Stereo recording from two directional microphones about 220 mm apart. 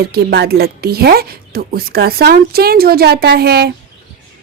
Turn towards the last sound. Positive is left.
turn(degrees=-45)  # may be behind; listen again after turning